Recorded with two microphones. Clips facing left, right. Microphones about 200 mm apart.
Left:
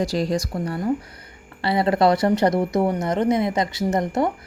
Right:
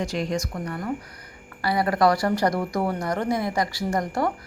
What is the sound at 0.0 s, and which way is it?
A woman's voice, 35° left (ahead or behind).